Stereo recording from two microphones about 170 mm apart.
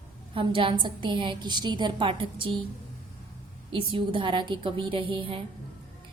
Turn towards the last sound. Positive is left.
turn(degrees=-30)  # may be behind; listen again after turning